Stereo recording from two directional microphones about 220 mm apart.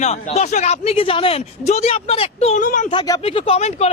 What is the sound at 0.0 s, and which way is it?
Speech, 30° left (ahead or behind).